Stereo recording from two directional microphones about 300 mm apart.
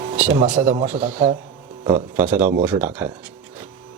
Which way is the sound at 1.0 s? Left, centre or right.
Centre.